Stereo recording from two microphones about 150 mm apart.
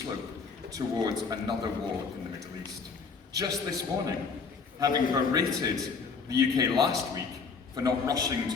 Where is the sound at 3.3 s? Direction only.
25° right (ahead or behind).